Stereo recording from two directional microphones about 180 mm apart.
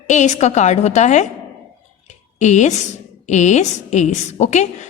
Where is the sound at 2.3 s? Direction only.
40° left (ahead or behind).